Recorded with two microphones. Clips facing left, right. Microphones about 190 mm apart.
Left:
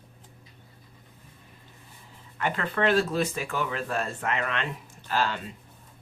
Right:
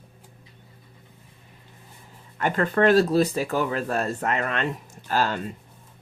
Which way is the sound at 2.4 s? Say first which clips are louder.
Right 6 dB; 45° right (ahead or behind).